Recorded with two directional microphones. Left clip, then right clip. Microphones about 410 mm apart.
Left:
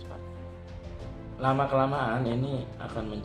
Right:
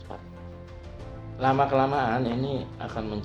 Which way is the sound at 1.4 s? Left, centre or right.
Centre.